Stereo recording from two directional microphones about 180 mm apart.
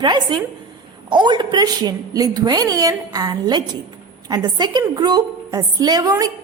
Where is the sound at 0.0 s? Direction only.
25° right (ahead or behind).